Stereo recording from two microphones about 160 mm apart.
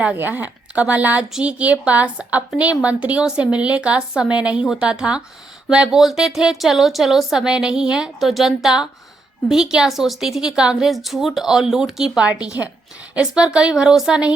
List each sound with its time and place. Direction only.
0.0 s a woman's voice: 10° right (ahead or behind)